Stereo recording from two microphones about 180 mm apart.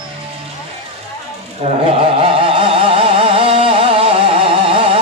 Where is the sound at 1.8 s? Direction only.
30° right (ahead or behind).